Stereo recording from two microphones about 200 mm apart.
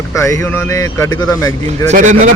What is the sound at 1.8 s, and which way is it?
Speech, 40° right (ahead or behind).